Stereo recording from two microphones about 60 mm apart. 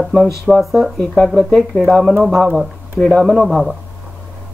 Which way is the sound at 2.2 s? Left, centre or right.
Centre.